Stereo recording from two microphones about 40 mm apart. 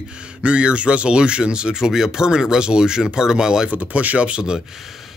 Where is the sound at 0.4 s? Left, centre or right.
Right.